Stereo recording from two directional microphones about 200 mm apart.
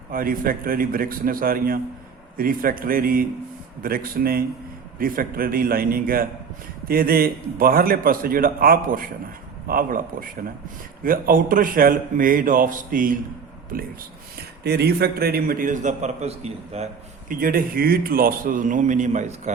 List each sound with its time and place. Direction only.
0.1 s a man's voice: 45° right (ahead or behind)
14.6 s a man's voice: 55° right (ahead or behind); by 19.5 s 35° right (ahead or behind)